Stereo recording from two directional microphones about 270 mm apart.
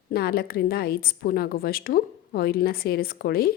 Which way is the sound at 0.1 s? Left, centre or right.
Left.